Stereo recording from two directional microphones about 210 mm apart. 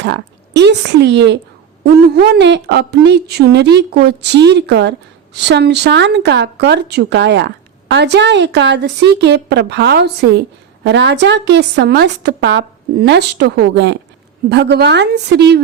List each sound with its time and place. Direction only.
0.0 s a woman's voice: 55° right (ahead or behind)